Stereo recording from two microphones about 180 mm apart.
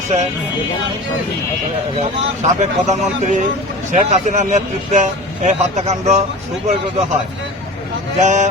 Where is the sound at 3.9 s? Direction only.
45° right (ahead or behind).